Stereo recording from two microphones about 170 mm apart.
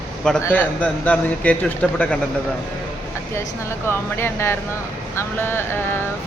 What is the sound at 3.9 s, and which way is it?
A man's voice, 15° left (ahead or behind).